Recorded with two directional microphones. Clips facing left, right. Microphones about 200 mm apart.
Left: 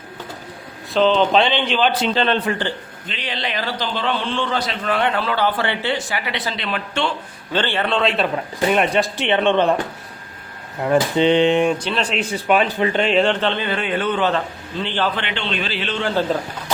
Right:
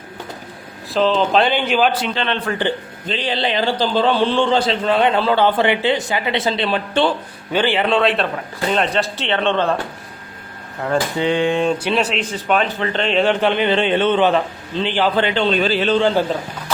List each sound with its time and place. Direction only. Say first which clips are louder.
0.9 s speech: even; 5° right (ahead or behind)
2.1 s a man's voice: left 3 dB; 35° left (ahead or behind)
3.1 s a man's voice: right 7 dB; 30° right (ahead or behind)
7.5 s speech: right 4 dB; 15° right (ahead or behind)
8.5 s speech: left 1 dB; 15° left (ahead or behind)
10.8 s speech: left 3 dB; 20° left (ahead or behind)
11.8 s speech: right 4 dB; 10° right (ahead or behind)
12.1 s speech: left 1 dB; 10° left (ahead or behind)
13.4 s speech: right 4 dB; 15° right (ahead or behind)
13.7 s a man's voice: right 5 dB; 25° right (ahead or behind)
15.1 s a man's voice: right 8 dB; 35° right (ahead or behind)